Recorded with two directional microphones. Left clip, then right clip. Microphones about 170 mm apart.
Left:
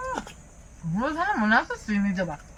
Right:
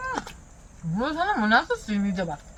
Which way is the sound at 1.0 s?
25° right (ahead or behind).